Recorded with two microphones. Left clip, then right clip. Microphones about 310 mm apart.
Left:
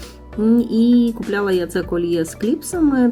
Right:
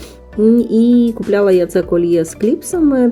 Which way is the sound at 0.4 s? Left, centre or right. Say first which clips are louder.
Right 5 dB; centre.